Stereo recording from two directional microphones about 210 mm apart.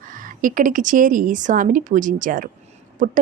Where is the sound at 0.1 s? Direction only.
40° right (ahead or behind).